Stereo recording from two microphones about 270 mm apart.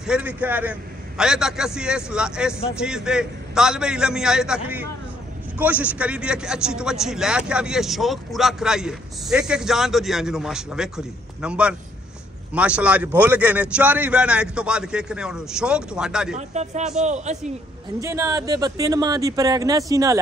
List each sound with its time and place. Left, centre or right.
0.0 s a man's voice: centre
16.3 s speech: right
18.0 s speech: centre